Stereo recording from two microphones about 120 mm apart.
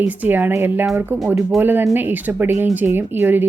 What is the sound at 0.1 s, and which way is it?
A woman's voice, 15° right (ahead or behind).